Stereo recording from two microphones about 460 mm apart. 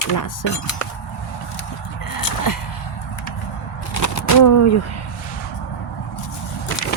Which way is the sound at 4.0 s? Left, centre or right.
Left.